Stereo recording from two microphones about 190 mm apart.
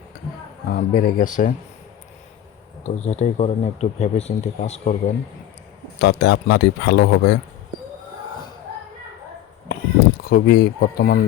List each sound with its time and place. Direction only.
0.7 s speech: 50° left (ahead or behind)
2.8 s speech: 35° left (ahead or behind)
6.0 s a man's voice: 70° left (ahead or behind)
10.2 s speech: 55° left (ahead or behind)